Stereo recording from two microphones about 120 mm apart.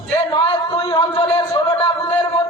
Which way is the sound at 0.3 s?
45° left (ahead or behind).